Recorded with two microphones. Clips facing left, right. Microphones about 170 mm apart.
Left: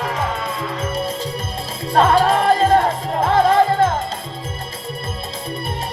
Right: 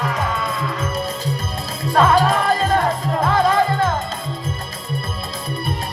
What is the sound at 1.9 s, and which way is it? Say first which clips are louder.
Music: left 1 dB; 30° left (ahead or behind).